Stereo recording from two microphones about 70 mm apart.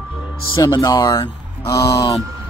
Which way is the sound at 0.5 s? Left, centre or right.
Left.